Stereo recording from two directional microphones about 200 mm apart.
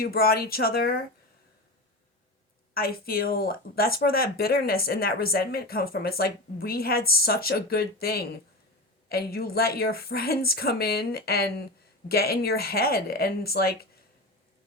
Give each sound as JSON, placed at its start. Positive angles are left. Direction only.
{"t": 0.0, "sound": "speech", "side_deg": 50}
{"t": 2.7, "sound": "speech", "side_deg": 50}